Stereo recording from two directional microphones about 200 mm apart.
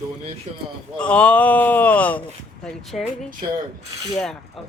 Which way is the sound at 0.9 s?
5° left (ahead or behind).